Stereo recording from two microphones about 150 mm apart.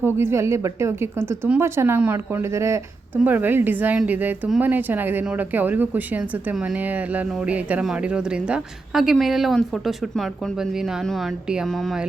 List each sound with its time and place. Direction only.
0.0 s a woman's voice: 15° right (ahead or behind)